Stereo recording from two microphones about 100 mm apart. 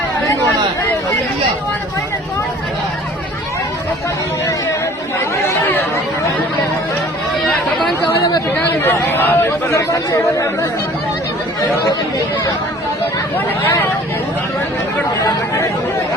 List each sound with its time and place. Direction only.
8.8 s speech: 20° left (ahead or behind)
9.5 s speech: 30° left (ahead or behind)